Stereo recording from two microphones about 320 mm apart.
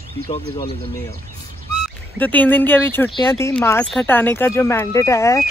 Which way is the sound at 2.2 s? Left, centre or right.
Centre.